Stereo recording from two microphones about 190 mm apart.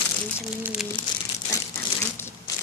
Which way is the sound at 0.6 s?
5° right (ahead or behind).